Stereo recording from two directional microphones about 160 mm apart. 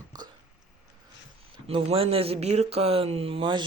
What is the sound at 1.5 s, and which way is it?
Speech, 35° right (ahead or behind).